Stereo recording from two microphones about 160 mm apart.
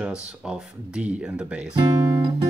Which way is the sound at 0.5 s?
5° right (ahead or behind).